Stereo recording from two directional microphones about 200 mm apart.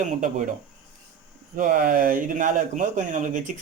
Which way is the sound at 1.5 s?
45° right (ahead or behind).